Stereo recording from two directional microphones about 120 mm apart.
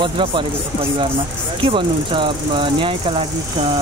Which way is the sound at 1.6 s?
45° right (ahead or behind).